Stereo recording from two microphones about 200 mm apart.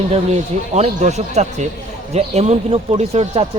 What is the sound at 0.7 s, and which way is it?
Speech, 35° right (ahead or behind).